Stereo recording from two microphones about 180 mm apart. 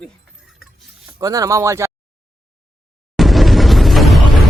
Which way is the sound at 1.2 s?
20° right (ahead or behind).